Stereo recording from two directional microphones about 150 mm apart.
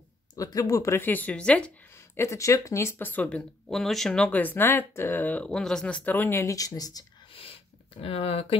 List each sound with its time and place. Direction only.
0.4 s speech: 25° left (ahead or behind); by 1.7 s 5° left (ahead or behind)
2.1 s speech: 20° left (ahead or behind)
8.0 s speech: 40° left (ahead or behind)